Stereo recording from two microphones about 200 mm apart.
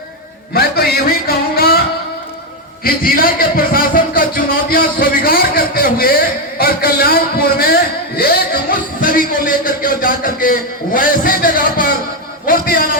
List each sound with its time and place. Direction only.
1.3 s music: 50° left (ahead or behind)
2.8 s music: 45° left (ahead or behind)
12.5 s a sound: 45° left (ahead or behind)